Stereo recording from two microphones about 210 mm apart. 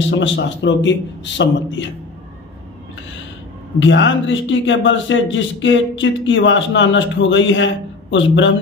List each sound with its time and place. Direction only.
0.0 s a man's voice: 60° left (ahead or behind)
3.8 s a man's voice: 60° left (ahead or behind)